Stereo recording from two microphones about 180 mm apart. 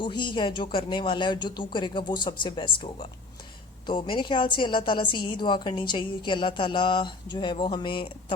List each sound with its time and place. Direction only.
0.0 s a woman's voice: 25° left (ahead or behind)